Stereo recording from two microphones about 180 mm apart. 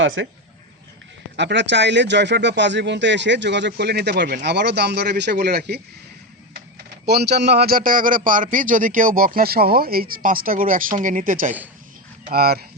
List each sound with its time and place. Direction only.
0.0 s speech: 90° right
1.4 s speech: 80° right
7.0 s a man's voice: 65° right (ahead or behind)